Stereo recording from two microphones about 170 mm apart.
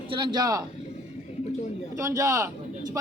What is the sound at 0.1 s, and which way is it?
Speech, 30° right (ahead or behind).